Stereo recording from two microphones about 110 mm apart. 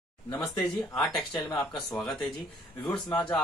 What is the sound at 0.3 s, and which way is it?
Speech, 5° left (ahead or behind).